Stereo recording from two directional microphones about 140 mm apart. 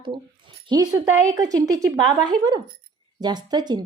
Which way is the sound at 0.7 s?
30° right (ahead or behind).